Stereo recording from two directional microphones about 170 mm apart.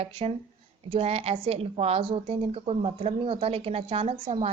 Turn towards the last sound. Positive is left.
turn(degrees=-35)  # may be behind; listen again after turning